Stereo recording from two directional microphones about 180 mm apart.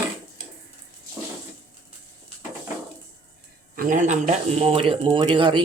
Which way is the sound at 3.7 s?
50° right (ahead or behind).